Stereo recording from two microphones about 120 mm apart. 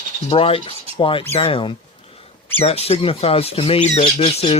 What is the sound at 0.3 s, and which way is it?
Speech, 55° left (ahead or behind).